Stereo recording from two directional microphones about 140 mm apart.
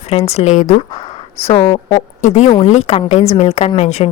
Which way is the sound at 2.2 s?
55° left (ahead or behind).